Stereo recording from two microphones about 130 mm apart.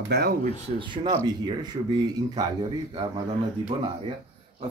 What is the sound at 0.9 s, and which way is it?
Speech, 35° right (ahead or behind).